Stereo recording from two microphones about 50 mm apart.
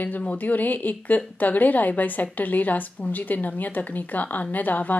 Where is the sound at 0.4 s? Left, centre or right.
Left.